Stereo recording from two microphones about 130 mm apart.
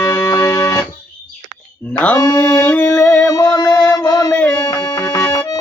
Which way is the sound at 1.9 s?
15° left (ahead or behind).